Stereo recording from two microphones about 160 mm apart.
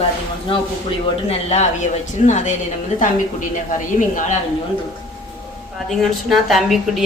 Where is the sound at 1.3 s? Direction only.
40° left (ahead or behind).